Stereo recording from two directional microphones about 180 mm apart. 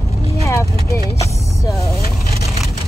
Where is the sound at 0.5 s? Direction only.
15° left (ahead or behind).